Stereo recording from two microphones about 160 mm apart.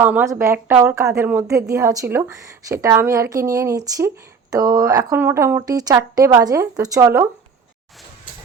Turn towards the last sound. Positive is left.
turn(degrees=-20)  # may be behind; listen again after turning